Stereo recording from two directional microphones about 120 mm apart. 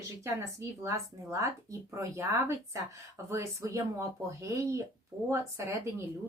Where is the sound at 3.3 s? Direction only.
25° right (ahead or behind).